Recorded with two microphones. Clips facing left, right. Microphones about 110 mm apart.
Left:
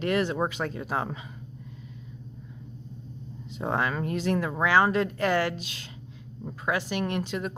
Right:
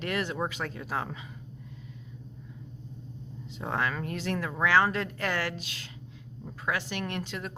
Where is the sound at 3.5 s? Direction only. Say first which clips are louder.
Left 3 dB; 20° left (ahead or behind).